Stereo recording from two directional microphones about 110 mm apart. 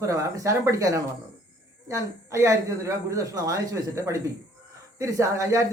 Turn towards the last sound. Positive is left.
turn(degrees=-30)  # may be behind; listen again after turning